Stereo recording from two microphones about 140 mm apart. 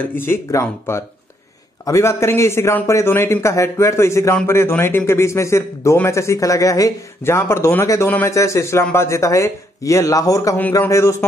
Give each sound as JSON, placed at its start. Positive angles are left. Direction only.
{"t": 0.0, "sound": "speech", "side_deg": 15}